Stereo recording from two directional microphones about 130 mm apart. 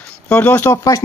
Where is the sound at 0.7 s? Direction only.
25° left (ahead or behind).